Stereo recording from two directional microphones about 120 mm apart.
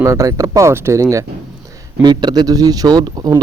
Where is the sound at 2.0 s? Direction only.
35° right (ahead or behind).